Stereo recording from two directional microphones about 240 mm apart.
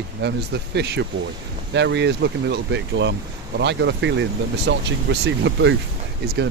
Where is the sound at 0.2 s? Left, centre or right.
Right.